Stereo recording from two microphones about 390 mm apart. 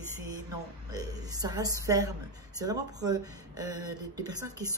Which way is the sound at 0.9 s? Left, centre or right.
Centre.